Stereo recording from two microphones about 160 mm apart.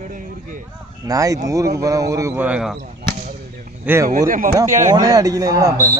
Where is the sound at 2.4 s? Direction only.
5° right (ahead or behind).